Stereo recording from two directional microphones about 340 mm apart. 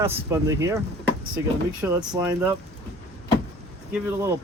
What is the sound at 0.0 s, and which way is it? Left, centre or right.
Speech, centre.